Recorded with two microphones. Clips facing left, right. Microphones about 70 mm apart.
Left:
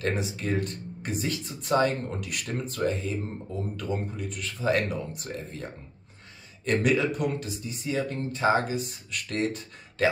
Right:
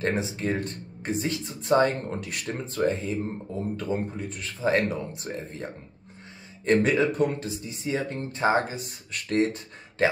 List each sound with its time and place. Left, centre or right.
0.0 s speech: right